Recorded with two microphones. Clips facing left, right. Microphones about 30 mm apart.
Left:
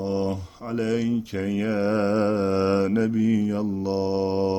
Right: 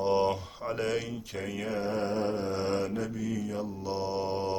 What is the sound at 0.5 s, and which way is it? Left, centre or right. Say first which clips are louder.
Mantra: left 5 dB; centre.